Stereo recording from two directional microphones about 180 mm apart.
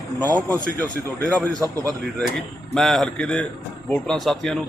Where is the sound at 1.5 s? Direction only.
20° right (ahead or behind).